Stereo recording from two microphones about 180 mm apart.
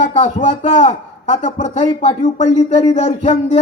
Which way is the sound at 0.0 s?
40° left (ahead or behind).